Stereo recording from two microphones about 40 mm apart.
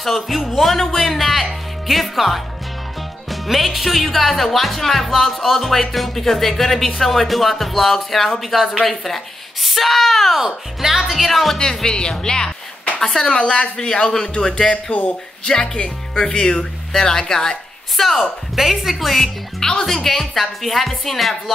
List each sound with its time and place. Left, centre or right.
0.0 s speech: centre
10.4 s speech: centre
11.8 s speech: centre
17.9 s speech: centre
18.6 s speech: centre
19.6 s speech: centre